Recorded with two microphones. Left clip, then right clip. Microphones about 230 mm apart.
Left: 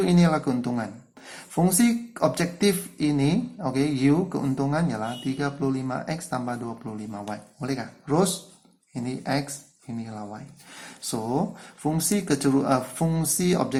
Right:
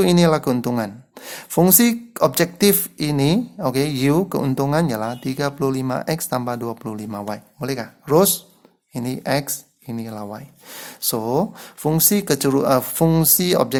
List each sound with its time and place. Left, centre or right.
0.0 s speech: right